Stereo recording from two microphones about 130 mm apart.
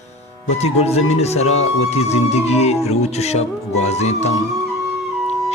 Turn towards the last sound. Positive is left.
turn(degrees=60)  # may be behind; listen again after turning